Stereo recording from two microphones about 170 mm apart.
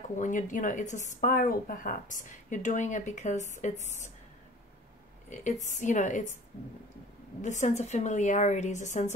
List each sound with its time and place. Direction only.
0.1 s a woman's voice: 50° left (ahead or behind)
5.3 s a woman's voice: 45° left (ahead or behind)
7.4 s a woman's voice: 45° left (ahead or behind)